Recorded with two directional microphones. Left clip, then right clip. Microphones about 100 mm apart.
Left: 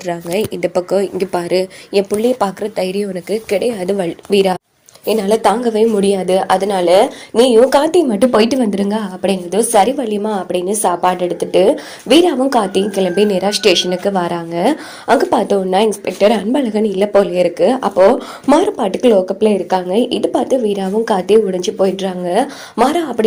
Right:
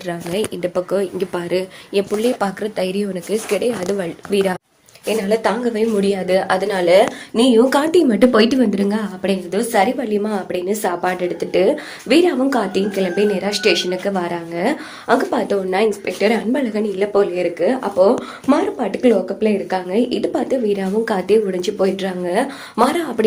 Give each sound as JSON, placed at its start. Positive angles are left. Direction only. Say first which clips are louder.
{"t": 0.0, "sound": "speech", "louder": "left 4 dB", "side_deg": 30}
{"t": 0.5, "sound": "speech", "louder": "left 6 dB", "side_deg": 50}
{"t": 2.4, "sound": "speech", "louder": "left 3 dB", "side_deg": 40}
{"t": 3.9, "sound": "a woman's voice", "louder": "left 5 dB", "side_deg": 60}
{"t": 5.6, "sound": "speech", "louder": "left 5 dB", "side_deg": 75}
{"t": 6.9, "sound": "speech", "louder": "left 2 dB", "side_deg": 40}
{"t": 13.1, "sound": "speech", "louder": "left 4 dB", "side_deg": 90}
{"t": 16.0, "sound": "speech", "louder": "left 5 dB", "side_deg": 60}